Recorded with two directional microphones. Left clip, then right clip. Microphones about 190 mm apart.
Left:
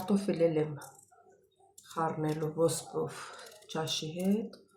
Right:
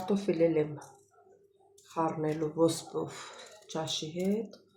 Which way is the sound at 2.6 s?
15° right (ahead or behind).